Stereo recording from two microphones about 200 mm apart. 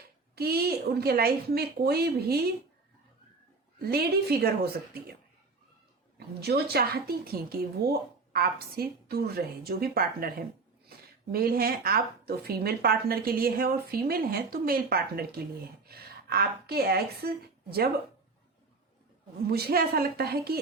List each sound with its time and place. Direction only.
0.3 s speech: 50° right (ahead or behind)
3.8 s speech: 50° right (ahead or behind)
6.1 s a woman's voice: 55° right (ahead or behind)
19.5 s speech: 50° right (ahead or behind)